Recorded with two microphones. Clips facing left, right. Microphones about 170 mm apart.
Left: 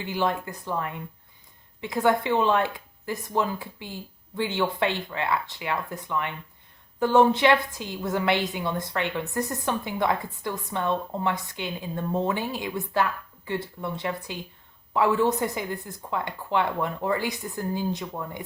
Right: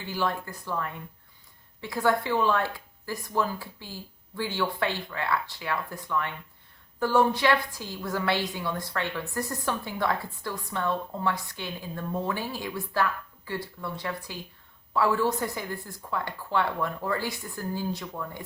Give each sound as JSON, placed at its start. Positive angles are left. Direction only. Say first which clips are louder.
{"t": 0.0, "sound": "a woman's voice", "louder": "left 3 dB", "side_deg": 20}